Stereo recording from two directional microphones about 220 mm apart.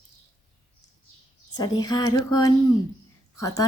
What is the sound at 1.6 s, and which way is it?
A woman's voice, 20° left (ahead or behind).